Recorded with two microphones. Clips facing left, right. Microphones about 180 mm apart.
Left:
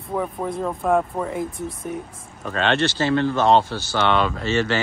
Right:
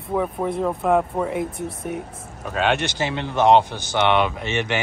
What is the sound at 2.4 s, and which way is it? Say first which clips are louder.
Speech: left 1 dB; 10° right (ahead or behind).